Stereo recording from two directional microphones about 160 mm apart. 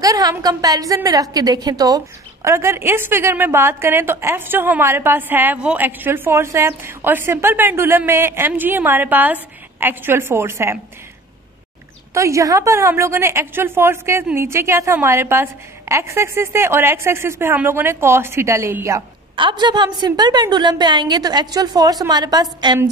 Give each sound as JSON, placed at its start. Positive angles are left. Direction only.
{"t": 0.0, "sound": "a woman's voice", "side_deg": -20}
{"t": 12.1, "sound": "a woman's voice", "side_deg": -20}
{"t": 19.3, "sound": "a woman's voice", "side_deg": -30}